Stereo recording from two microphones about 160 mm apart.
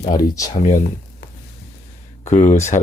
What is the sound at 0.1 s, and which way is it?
Speech, 20° left (ahead or behind).